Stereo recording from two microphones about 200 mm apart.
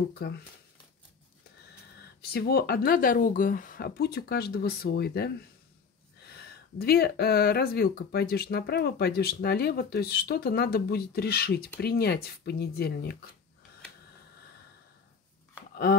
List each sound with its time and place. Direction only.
0.2 s speech: 55° left (ahead or behind)
2.2 s speech: 50° left (ahead or behind)
15.7 s a sound: 50° left (ahead or behind)